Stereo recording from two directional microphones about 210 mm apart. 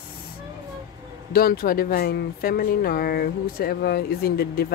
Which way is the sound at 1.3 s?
45° left (ahead or behind).